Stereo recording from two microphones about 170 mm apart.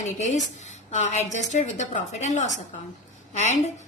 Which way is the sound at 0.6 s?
45° left (ahead or behind).